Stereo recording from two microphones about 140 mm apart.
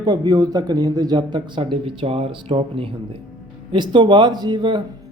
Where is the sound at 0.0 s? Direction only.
30° right (ahead or behind).